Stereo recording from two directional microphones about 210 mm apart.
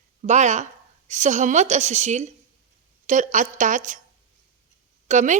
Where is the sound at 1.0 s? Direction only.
35° right (ahead or behind).